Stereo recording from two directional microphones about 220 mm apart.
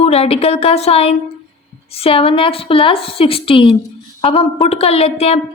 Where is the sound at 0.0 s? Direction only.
25° left (ahead or behind).